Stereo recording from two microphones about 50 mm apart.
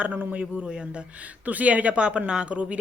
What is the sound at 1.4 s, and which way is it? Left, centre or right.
Speech, right.